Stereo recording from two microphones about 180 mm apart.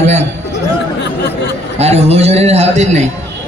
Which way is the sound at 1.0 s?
70° left (ahead or behind).